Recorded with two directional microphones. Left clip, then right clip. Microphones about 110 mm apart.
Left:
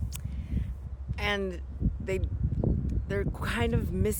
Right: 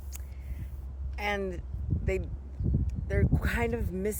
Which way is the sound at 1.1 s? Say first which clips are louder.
Left 1 dB; 15° left (ahead or behind).